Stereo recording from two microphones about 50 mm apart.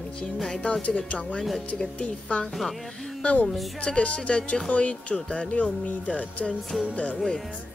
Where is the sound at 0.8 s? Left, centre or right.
Left.